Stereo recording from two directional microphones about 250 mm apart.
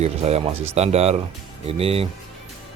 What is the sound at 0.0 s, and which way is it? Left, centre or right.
Speech, right.